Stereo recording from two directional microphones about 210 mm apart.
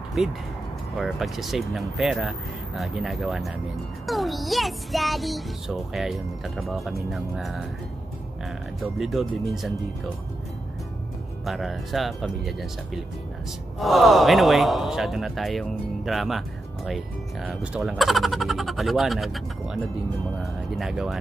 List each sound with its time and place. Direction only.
0.2 s speech: centre (ahead or behind)
11.4 s speech: centre (ahead or behind)